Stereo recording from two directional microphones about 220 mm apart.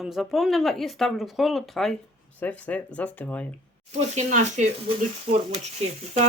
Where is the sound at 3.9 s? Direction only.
35° right (ahead or behind).